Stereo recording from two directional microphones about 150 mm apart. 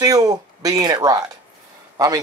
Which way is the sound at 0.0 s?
25° right (ahead or behind).